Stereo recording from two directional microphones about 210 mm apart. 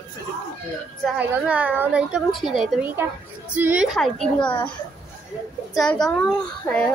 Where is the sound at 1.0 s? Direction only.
5° right (ahead or behind).